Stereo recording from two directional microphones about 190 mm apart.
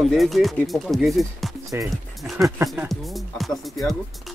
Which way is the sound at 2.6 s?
15° right (ahead or behind).